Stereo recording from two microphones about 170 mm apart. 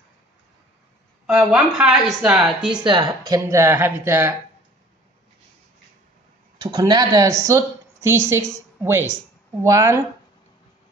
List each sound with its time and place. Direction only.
1.2 s a woman's voice: 5° right (ahead or behind)
2.8 s speech: 25° right (ahead or behind)
6.7 s a woman's voice: 25° right (ahead or behind)